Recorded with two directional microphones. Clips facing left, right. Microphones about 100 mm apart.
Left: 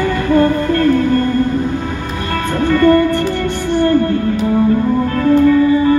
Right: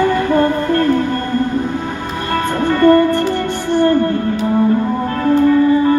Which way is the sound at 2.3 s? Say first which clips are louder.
Left 1 dB; 30° right (ahead or behind).